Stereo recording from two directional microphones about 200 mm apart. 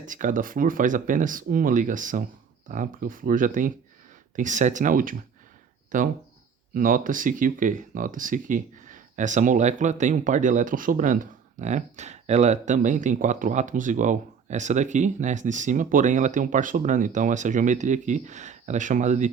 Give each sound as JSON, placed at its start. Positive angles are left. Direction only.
{"t": 0.0, "sound": "speech", "side_deg": -40}